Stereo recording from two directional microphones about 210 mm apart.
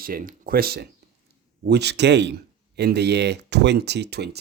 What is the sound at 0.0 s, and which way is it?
Speech, 40° right (ahead or behind).